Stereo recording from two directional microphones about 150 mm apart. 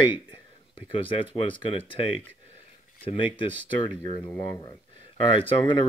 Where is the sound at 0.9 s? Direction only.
35° left (ahead or behind).